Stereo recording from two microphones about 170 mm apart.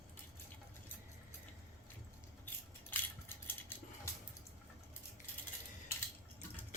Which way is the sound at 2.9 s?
10° left (ahead or behind).